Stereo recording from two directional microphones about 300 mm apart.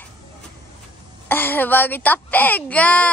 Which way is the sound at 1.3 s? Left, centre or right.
Centre.